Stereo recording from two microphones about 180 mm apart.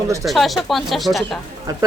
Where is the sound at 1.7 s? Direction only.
20° right (ahead or behind).